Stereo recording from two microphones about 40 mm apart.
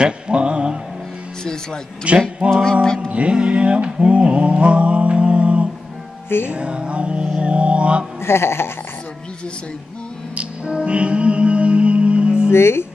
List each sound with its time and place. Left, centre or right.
0.0 s a sound: right
1.4 s speech: centre
2.1 s a sound: right
2.5 s music: centre
3.1 s mantra: right
6.2 s music: left
6.5 s music: right
7.3 s a sound: right
8.2 s speech: left
10.3 s music: right
12.4 s speech: left